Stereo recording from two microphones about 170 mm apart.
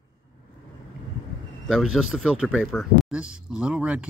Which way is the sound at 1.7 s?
Centre (ahead or behind).